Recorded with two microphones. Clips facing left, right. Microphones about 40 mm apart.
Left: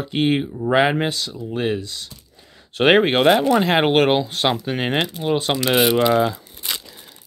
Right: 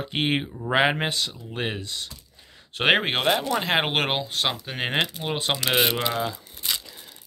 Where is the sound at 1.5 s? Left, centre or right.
Centre.